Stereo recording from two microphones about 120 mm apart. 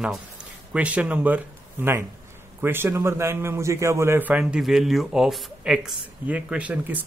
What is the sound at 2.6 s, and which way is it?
A man's voice, 20° right (ahead or behind).